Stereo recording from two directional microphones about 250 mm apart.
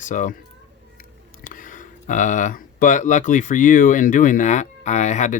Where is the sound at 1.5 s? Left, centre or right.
Left.